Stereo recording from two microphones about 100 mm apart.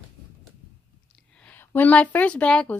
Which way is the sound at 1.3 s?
15° left (ahead or behind).